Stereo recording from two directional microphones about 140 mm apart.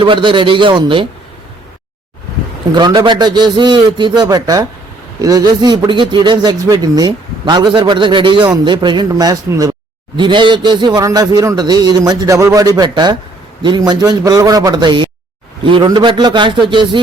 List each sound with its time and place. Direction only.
0.0 s speech: 35° right (ahead or behind)
2.7 s speech: 35° right (ahead or behind)